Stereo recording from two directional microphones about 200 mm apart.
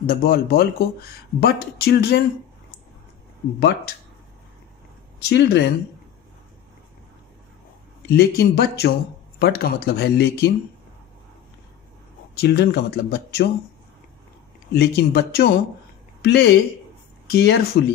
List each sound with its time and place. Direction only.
0.0 s speech: 50° left (ahead or behind)
5.3 s speech: 60° left (ahead or behind)
8.1 s speech: 55° left (ahead or behind)
12.4 s speech: 55° left (ahead or behind)
14.7 s speech: 55° left (ahead or behind)